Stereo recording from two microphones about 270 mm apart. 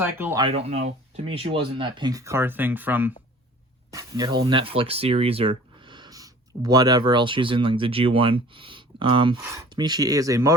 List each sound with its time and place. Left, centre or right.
0.0 s speech: centre
0.4 s speech: right